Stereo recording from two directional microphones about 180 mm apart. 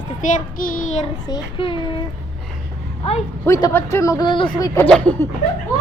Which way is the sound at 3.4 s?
15° left (ahead or behind).